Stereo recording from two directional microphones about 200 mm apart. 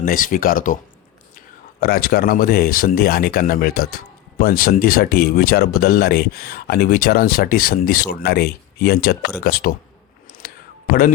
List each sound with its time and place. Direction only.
0.0 s speech: 45° left (ahead or behind)
1.8 s speech: 50° left (ahead or behind)